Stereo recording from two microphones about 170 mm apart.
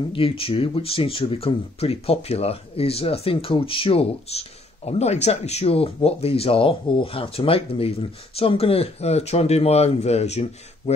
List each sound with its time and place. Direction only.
0.1 s speech: 30° left (ahead or behind)